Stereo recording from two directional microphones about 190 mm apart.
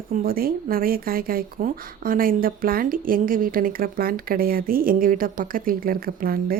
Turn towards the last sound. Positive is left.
turn(degrees=-50)  # may be behind; listen again after turning